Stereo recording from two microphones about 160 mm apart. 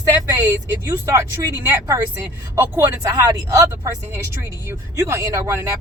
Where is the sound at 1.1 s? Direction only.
15° right (ahead or behind).